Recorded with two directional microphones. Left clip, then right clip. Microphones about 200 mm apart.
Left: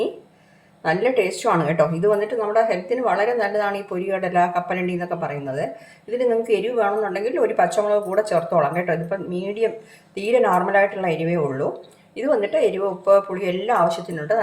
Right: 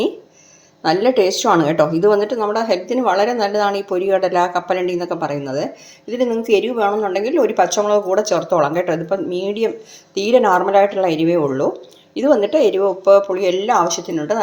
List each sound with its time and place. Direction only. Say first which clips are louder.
0.8 s speech: right 5 dB; 40° right (ahead or behind)